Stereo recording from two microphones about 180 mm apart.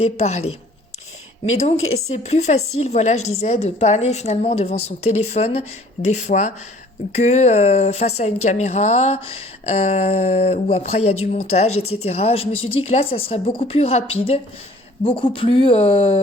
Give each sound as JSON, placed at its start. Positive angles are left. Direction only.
{"t": 0.0, "sound": "speech", "side_deg": 35}
{"t": 1.5, "sound": "speech", "side_deg": 35}